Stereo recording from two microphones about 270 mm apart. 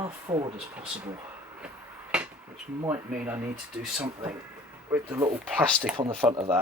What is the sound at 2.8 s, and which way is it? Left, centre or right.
Speech, centre.